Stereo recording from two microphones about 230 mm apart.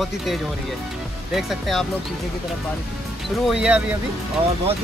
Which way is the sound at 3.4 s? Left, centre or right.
Centre.